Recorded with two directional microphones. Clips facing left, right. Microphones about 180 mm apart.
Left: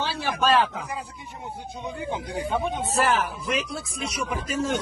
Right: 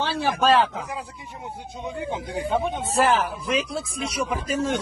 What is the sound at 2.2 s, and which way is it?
Speech, 15° right (ahead or behind).